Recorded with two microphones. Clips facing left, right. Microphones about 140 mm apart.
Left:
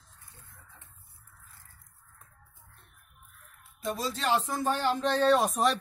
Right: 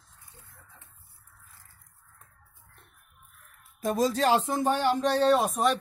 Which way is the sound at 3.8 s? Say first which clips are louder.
Right 7 dB; 45° right (ahead or behind).